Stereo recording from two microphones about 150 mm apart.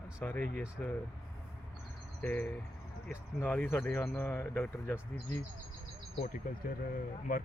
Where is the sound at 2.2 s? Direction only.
10° left (ahead or behind).